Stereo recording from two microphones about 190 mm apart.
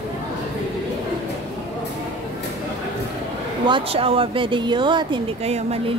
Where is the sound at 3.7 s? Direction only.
30° right (ahead or behind).